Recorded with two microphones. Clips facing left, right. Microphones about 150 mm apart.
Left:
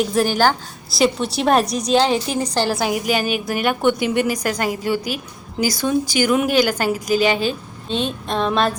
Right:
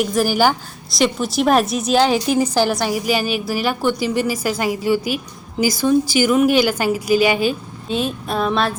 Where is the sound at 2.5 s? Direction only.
Centre (ahead or behind).